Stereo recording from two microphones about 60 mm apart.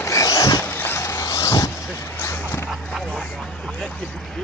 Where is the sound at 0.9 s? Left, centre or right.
Left.